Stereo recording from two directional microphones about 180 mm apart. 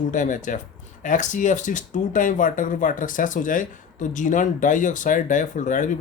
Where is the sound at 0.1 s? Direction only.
45° left (ahead or behind).